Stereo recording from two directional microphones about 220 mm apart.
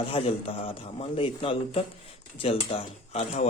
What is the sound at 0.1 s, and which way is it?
Speech, 25° left (ahead or behind).